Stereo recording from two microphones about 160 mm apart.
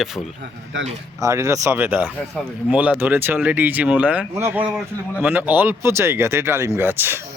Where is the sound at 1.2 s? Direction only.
20° right (ahead or behind).